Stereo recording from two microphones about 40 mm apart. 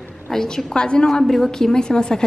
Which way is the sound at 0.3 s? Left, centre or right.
Centre.